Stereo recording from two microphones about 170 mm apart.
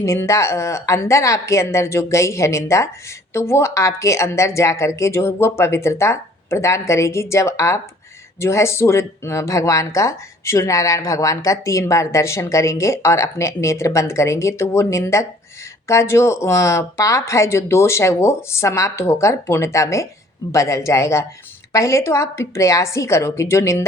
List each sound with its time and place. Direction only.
0.0 s speech: 15° left (ahead or behind)